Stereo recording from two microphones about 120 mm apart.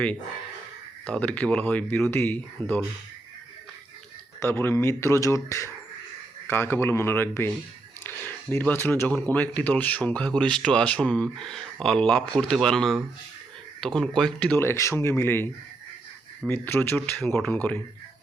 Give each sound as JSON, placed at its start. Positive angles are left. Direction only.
{"t": 1.0, "sound": "speech", "side_deg": 10}
{"t": 4.4, "sound": "speech", "side_deg": 20}
{"t": 16.5, "sound": "speech", "side_deg": 20}